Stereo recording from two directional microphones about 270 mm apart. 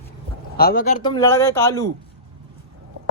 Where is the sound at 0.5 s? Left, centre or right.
Left.